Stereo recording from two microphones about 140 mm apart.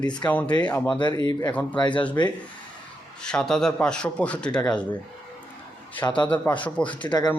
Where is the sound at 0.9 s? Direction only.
35° left (ahead or behind).